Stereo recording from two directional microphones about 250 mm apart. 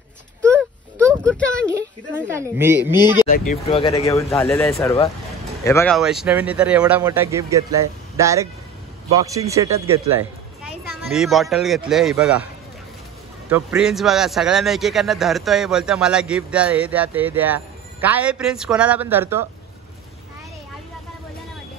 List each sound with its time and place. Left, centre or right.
0.4 s a sound: centre
1.7 s a man's voice: centre
3.3 s speech: left
3.6 s speech: left
4.0 s speech: centre
5.9 s a man's voice: centre
10.6 s speech: centre
13.5 s a man's voice: centre